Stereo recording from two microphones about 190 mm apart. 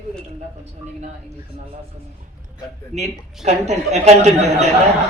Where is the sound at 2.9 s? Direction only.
35° right (ahead or behind).